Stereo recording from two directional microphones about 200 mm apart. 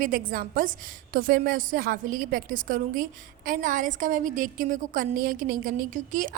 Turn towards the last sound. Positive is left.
turn(degrees=-40)  # may be behind; listen again after turning